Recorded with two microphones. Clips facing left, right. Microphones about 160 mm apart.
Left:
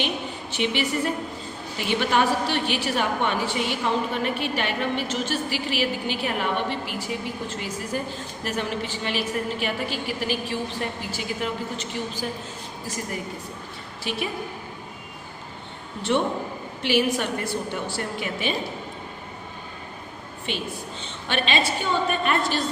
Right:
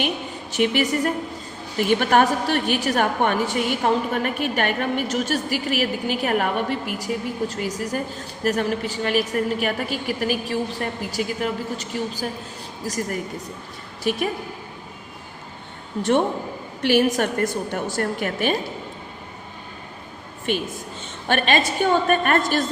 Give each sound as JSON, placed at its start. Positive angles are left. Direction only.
{"t": 0.5, "sound": "a woman's voice", "side_deg": -45}
{"t": 16.8, "sound": "a woman's voice", "side_deg": -45}
{"t": 20.5, "sound": "a woman's voice", "side_deg": -45}